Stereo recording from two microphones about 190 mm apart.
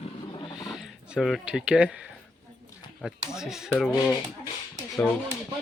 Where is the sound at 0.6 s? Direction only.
Centre (ahead or behind).